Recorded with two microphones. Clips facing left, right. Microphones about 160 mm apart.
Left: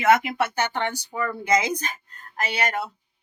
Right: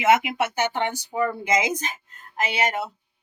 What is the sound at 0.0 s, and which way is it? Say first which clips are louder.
A woman's voice: even; 20° right (ahead or behind).